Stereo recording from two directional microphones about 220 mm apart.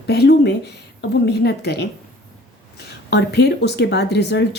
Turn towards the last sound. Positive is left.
turn(degrees=50)  # may be behind; listen again after turning